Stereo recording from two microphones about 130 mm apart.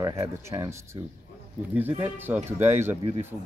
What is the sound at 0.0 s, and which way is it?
Speech, 25° right (ahead or behind).